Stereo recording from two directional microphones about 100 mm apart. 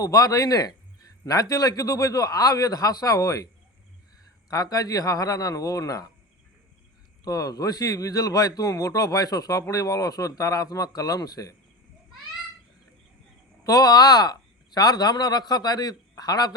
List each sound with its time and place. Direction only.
0.0 s a man's voice: 35° left (ahead or behind)
7.3 s a man's voice: 35° left (ahead or behind)
13.7 s a man's voice: 40° left (ahead or behind)